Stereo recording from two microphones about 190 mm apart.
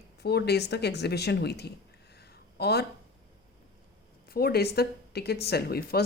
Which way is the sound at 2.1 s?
60° left (ahead or behind).